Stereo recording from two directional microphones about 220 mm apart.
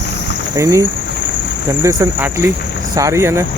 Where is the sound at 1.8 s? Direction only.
10° right (ahead or behind).